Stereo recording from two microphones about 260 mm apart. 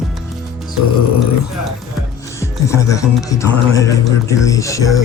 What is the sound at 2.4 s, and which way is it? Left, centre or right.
Speech, centre.